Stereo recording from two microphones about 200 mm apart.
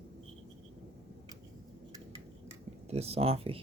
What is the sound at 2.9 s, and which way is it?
Speech, 30° right (ahead or behind).